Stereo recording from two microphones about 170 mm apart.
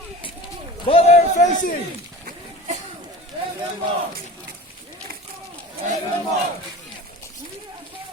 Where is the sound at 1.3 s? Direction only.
50° left (ahead or behind).